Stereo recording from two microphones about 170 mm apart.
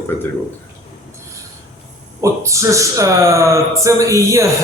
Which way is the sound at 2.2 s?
15° right (ahead or behind).